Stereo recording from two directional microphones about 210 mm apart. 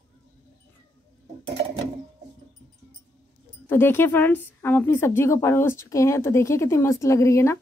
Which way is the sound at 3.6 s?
10° left (ahead or behind).